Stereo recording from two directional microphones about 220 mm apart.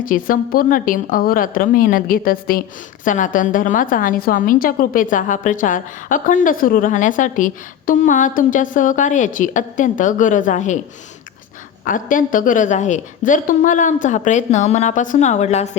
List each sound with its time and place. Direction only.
0.0 s a woman's voice: 40° left (ahead or behind)
11.9 s a woman's voice: 35° left (ahead or behind)